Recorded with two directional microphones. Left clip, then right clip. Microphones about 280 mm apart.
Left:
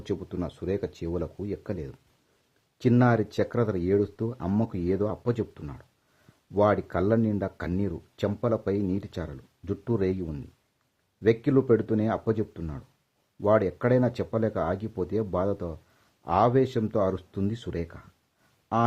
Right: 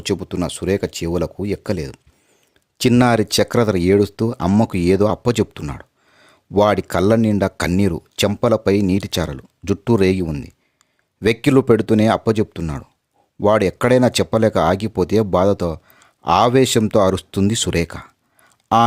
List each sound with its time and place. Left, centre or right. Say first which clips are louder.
0.0 s speech: right 11 dB; right